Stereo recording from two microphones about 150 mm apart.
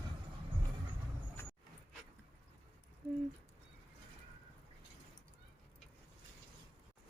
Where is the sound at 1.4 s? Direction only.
15° left (ahead or behind).